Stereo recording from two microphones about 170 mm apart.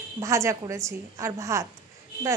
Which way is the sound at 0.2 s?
20° right (ahead or behind).